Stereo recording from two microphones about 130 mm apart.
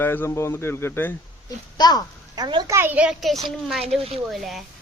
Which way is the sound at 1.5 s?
30° left (ahead or behind).